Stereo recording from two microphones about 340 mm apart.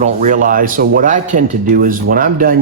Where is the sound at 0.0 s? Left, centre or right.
Right.